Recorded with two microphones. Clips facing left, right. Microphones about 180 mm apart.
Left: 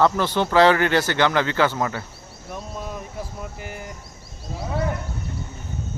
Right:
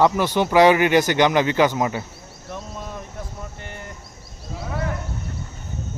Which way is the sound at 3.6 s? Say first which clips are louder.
Left 2 dB; 5° left (ahead or behind).